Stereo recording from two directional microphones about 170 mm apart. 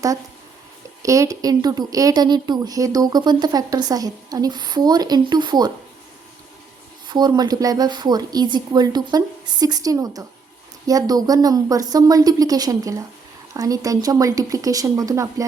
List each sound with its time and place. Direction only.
1.0 s a woman's voice: 20° right (ahead or behind)
7.1 s a woman's voice: 25° right (ahead or behind)